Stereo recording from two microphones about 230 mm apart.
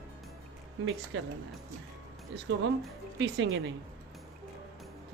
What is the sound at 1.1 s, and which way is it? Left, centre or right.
Speech, right.